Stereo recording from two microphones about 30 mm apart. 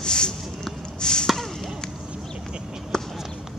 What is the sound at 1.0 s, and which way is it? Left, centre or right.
Chop, left.